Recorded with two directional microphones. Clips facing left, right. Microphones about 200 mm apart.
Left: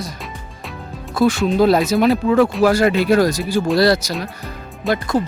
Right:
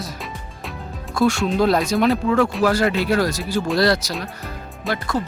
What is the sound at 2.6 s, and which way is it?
Speech, 15° left (ahead or behind).